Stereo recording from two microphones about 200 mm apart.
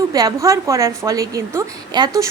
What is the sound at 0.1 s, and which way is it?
A woman's voice, 20° right (ahead or behind).